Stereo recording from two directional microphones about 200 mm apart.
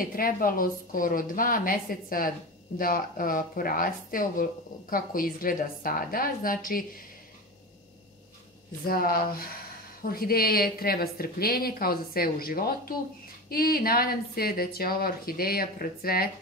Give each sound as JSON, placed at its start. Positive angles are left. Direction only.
{"t": 0.1, "sound": "speech", "side_deg": 45}
{"t": 8.8, "sound": "speech", "side_deg": 45}